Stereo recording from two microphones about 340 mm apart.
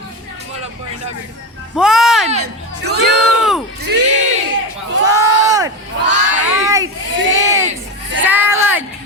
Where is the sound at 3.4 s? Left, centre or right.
Centre.